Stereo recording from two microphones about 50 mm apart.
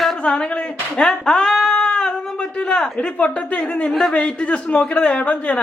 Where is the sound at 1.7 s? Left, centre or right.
Left.